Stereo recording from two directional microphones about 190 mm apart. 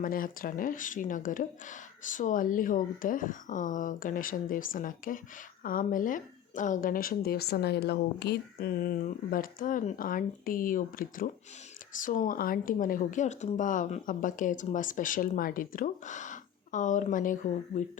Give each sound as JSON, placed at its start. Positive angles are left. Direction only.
{"t": 0.0, "sound": "speech", "side_deg": 45}